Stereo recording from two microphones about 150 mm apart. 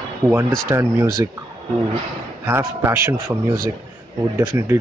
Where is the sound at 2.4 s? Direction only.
15° right (ahead or behind).